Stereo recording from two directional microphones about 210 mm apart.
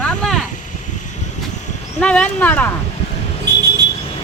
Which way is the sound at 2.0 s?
5° left (ahead or behind).